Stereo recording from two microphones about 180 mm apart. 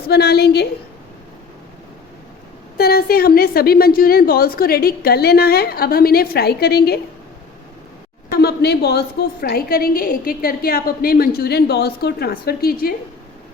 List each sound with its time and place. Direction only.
0.1 s a woman's voice: 65° left (ahead or behind)
2.7 s a woman's voice: 60° left (ahead or behind)
8.3 s a woman's voice: 60° left (ahead or behind)